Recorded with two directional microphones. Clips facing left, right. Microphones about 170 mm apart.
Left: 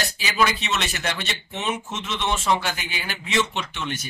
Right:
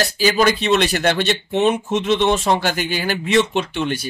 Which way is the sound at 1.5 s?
60° right (ahead or behind).